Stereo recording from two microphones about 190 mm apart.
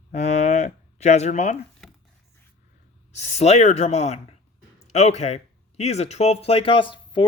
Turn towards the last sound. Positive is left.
turn(degrees=25)  # may be behind; listen again after turning